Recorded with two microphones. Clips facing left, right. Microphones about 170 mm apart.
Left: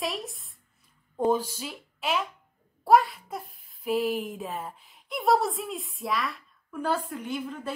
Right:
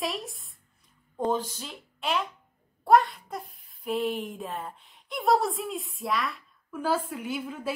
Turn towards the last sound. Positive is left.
turn(degrees=-10)  # may be behind; listen again after turning